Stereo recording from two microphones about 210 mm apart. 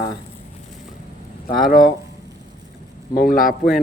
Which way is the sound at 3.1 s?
45° left (ahead or behind).